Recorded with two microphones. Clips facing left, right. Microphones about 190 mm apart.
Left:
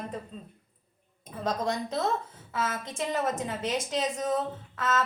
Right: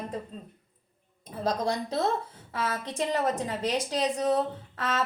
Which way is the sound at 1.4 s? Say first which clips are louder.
Right 1 dB; 35° right (ahead or behind).